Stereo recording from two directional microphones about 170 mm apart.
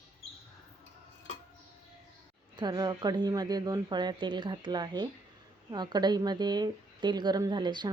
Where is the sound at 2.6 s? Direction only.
25° right (ahead or behind).